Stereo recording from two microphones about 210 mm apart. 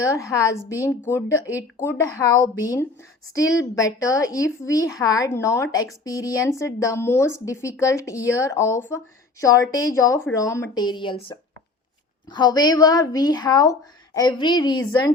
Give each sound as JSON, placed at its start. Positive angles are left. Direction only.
{"t": 0.0, "sound": "a woman's voice", "side_deg": 15}